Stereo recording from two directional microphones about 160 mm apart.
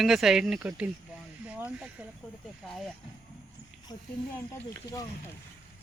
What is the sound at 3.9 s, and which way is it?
Speech, 25° left (ahead or behind).